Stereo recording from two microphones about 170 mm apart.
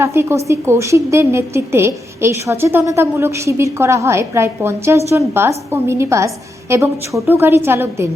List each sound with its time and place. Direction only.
0.0 s a woman's voice: 15° right (ahead or behind)